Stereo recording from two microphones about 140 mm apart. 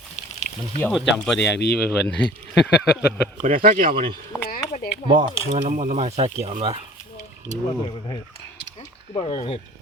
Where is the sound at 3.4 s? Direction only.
75° right (ahead or behind).